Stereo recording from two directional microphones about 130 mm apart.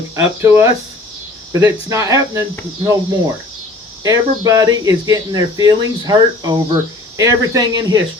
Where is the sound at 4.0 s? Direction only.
30° right (ahead or behind).